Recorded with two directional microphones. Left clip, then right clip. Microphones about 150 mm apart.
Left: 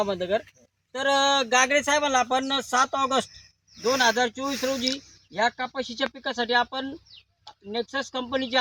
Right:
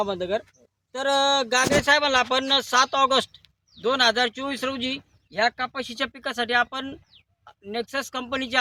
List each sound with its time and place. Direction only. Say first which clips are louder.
0.0 s speech: even; 30° right (ahead or behind)